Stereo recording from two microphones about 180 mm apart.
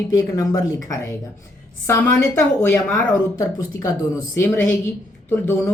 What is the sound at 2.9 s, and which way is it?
A woman's voice, 20° left (ahead or behind).